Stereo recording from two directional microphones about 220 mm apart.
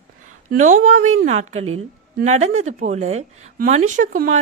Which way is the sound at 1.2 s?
30° right (ahead or behind).